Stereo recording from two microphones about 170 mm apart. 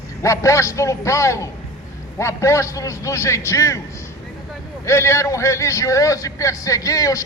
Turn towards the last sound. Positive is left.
turn(degrees=20)  # may be behind; listen again after turning